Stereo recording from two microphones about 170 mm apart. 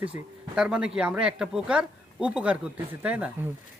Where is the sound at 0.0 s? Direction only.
5° right (ahead or behind).